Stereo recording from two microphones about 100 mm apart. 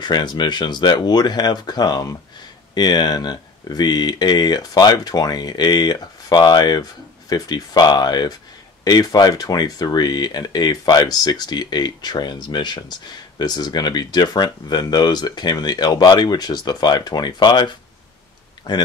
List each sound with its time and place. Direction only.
0.0 s speech: 45° left (ahead or behind)